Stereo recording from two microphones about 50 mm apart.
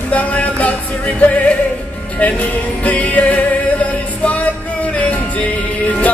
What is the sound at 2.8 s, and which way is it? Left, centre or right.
Music, left.